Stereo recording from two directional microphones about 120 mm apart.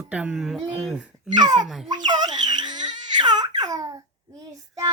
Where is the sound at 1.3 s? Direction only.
35° right (ahead or behind).